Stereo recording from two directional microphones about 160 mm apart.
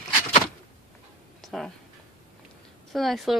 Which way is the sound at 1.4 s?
Centre (ahead or behind).